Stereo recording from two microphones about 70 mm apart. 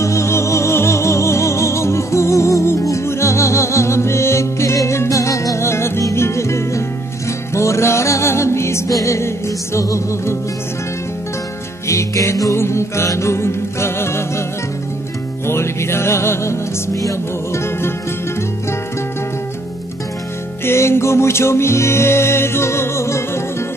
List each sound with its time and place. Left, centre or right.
0.0 s music: left
11.9 s music: left
15.4 s music: left
20.6 s music: left